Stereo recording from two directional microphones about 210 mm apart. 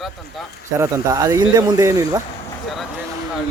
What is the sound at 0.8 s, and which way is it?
Speech, 15° right (ahead or behind).